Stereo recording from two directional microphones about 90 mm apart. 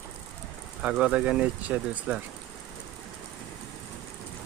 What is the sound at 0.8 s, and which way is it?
Speech, 10° right (ahead or behind).